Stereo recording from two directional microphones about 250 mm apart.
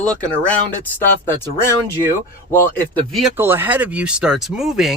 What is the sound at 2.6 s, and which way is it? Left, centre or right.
Speech, centre.